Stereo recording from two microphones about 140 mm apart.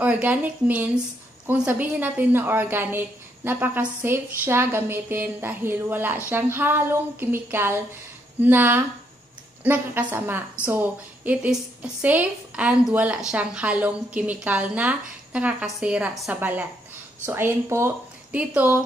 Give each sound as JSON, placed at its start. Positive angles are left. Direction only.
{"t": 0.0, "sound": "a woman's voice", "side_deg": -10}